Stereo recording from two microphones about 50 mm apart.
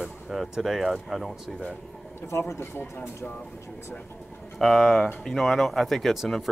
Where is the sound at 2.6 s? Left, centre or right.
Left.